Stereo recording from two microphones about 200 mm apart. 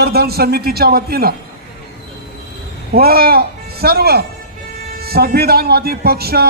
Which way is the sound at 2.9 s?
50° right (ahead or behind).